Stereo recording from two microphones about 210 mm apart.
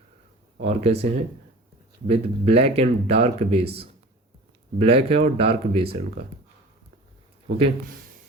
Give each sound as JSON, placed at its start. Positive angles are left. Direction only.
{"t": 0.6, "sound": "speech", "side_deg": -30}